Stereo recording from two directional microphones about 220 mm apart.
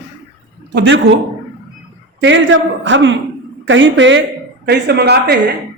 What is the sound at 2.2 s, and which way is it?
Speech, 60° right (ahead or behind).